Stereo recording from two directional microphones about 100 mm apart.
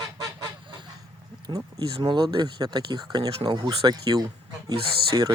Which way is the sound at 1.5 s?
45° right (ahead or behind).